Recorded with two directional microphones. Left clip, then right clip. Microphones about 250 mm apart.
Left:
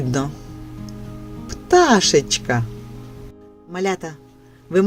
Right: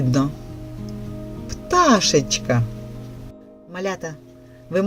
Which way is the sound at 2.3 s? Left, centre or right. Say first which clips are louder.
Left 1 dB; left.